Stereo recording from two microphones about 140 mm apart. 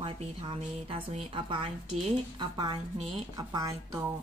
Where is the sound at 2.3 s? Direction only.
30° right (ahead or behind).